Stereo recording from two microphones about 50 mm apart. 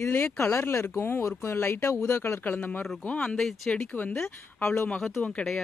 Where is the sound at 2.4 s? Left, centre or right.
Left.